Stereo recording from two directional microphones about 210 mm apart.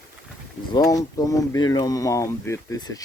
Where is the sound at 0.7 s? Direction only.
15° left (ahead or behind).